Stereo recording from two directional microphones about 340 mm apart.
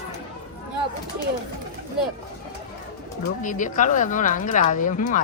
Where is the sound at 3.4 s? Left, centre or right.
Left.